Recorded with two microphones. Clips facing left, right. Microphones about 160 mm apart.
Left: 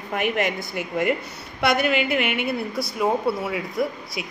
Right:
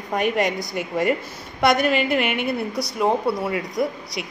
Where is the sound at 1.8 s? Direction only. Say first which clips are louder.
Right 2 dB; 5° left (ahead or behind).